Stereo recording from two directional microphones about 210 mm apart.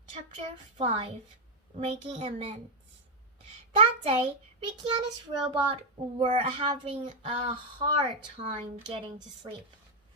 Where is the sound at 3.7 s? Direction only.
25° right (ahead or behind).